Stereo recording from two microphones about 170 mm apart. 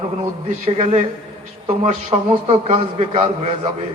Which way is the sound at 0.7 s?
35° right (ahead or behind).